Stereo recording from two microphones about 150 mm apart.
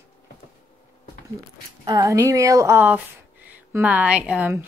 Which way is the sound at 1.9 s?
20° right (ahead or behind).